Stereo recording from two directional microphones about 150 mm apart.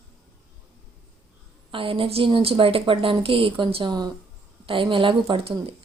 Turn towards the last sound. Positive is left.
turn(degrees=-40)  # may be behind; listen again after turning